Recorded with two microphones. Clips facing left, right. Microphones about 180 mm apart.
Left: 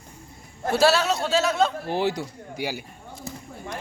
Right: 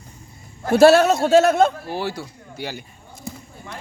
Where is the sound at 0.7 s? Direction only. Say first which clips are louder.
Right 8 dB; 55° right (ahead or behind).